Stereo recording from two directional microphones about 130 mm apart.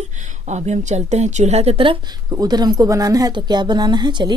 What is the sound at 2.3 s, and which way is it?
Speech, 30° right (ahead or behind).